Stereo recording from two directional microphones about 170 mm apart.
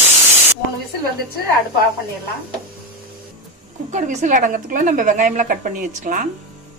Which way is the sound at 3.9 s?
45° right (ahead or behind).